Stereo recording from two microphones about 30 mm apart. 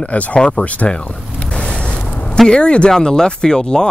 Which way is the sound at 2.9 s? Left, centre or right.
Left.